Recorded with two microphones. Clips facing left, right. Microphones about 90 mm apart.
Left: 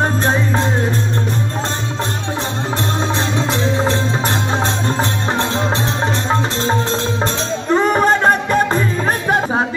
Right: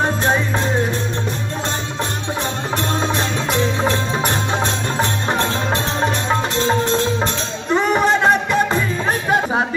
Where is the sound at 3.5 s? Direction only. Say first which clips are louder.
Right 1 dB; 25° left (ahead or behind).